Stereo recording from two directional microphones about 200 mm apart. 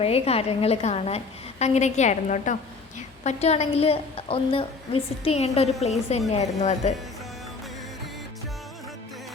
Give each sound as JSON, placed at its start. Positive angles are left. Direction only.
{"t": 0.0, "sound": "a woman's voice", "side_deg": 30}